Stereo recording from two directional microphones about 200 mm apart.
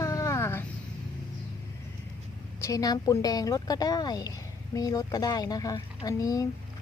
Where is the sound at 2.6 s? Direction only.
15° left (ahead or behind).